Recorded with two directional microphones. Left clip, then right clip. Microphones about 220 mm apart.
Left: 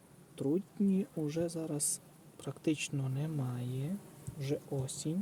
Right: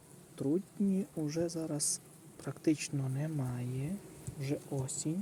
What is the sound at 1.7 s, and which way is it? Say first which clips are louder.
Speech: right 1 dB; 20° left (ahead or behind).